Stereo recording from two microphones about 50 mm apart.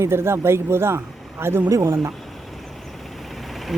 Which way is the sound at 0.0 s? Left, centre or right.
Right.